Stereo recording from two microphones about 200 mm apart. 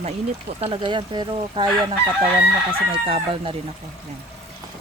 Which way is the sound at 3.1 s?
30° right (ahead or behind).